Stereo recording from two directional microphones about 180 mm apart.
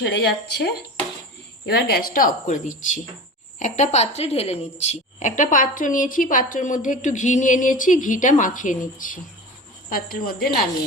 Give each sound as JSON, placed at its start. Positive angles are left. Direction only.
{"t": 0.0, "sound": "a woman's voice", "side_deg": 65}